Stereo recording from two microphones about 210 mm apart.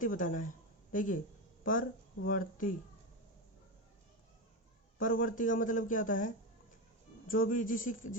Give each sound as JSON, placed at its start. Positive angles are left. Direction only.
{"t": 0.0, "sound": "speech", "side_deg": 40}
{"t": 4.9, "sound": "speech", "side_deg": 40}